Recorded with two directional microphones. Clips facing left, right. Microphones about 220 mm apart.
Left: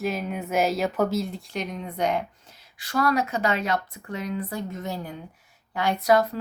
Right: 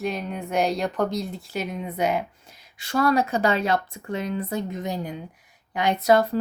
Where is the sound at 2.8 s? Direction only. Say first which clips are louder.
Right 3 dB; 25° right (ahead or behind).